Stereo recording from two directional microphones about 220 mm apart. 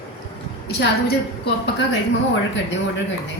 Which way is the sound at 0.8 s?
45° left (ahead or behind).